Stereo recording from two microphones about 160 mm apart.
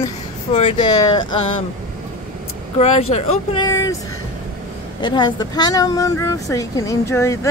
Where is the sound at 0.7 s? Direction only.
25° left (ahead or behind).